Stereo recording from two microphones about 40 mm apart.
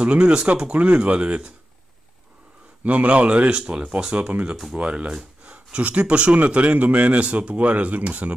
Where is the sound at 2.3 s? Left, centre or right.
Right.